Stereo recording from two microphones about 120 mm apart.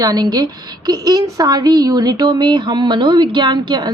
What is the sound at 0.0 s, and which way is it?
A woman's voice, 35° right (ahead or behind).